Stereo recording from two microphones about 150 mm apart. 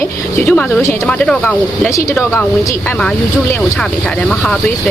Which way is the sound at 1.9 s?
20° left (ahead or behind).